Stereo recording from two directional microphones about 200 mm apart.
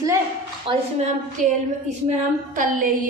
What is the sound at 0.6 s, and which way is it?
A woman's voice, 35° right (ahead or behind).